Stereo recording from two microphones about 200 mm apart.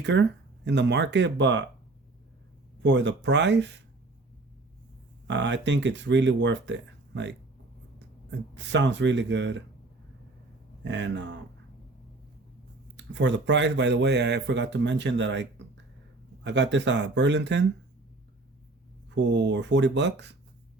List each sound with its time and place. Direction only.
0.0 s speech: 60° right (ahead or behind)
2.8 s speech: 60° right (ahead or behind)
5.3 s speech: 60° right (ahead or behind)
8.5 s speech: 60° right (ahead or behind)
10.8 s speech: 65° right (ahead or behind)
13.0 s speech: 65° right (ahead or behind)
19.1 s speech: 60° right (ahead or behind)